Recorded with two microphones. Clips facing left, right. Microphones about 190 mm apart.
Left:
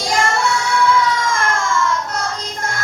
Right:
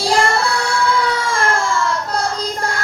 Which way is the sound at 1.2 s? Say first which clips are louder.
Right 1 dB; 35° right (ahead or behind).